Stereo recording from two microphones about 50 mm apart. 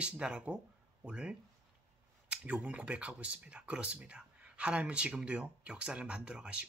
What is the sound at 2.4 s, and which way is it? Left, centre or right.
Speech, right.